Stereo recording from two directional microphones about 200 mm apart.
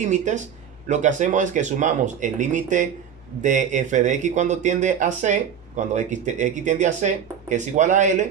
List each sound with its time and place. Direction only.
0.0 s speech: 35° right (ahead or behind)